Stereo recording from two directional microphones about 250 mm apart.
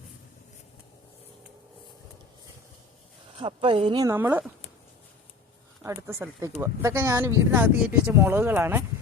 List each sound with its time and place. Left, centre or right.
3.3 s speech: centre
5.8 s speech: centre